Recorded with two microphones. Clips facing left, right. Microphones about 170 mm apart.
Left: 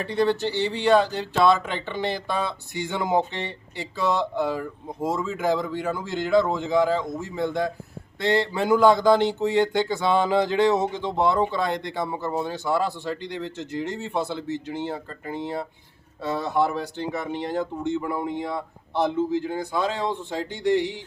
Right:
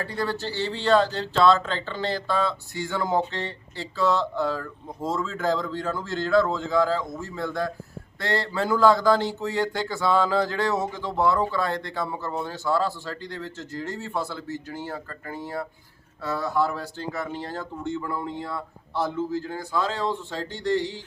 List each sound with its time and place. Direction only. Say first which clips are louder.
0.0 s speech: left 6 dB; 20° left (ahead or behind)